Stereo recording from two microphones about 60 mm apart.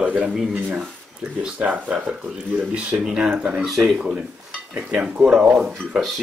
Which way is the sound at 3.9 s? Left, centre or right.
Centre.